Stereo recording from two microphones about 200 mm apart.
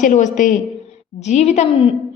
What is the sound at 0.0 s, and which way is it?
A man's voice, 40° left (ahead or behind).